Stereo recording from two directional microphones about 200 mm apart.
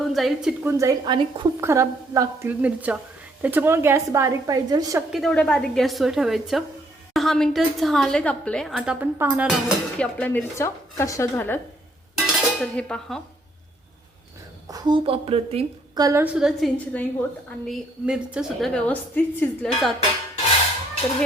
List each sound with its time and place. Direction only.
0.1 s a woman's voice: centre (ahead or behind)
0.6 s a woman's voice: 15° right (ahead or behind)
5.1 s a woman's voice: 5° left (ahead or behind)
12.2 s dishes: 5° left (ahead or behind)
14.7 s a woman's voice: 20° right (ahead or behind)
16.0 s a woman's voice: 10° right (ahead or behind); by 17.1 s 5° left (ahead or behind)
17.7 s a woman's voice: 5° right (ahead or behind)